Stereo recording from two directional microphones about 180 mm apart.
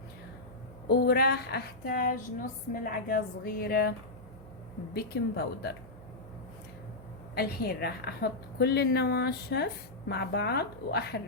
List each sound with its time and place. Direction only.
0.9 s speech: 60° left (ahead or behind)
5.1 s speech: 60° left (ahead or behind)
7.3 s speech: 60° left (ahead or behind)